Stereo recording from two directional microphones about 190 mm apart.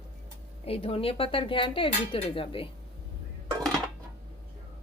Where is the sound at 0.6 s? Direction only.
30° left (ahead or behind).